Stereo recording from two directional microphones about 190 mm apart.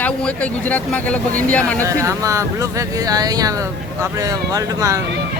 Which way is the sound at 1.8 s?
15° right (ahead or behind).